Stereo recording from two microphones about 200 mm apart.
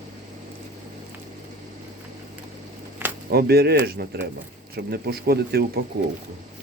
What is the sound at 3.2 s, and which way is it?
Speech, 50° right (ahead or behind).